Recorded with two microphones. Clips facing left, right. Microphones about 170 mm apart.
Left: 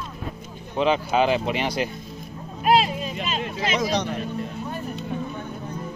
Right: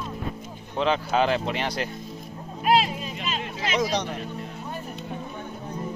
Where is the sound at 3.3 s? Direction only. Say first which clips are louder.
Left 2 dB; 35° left (ahead or behind).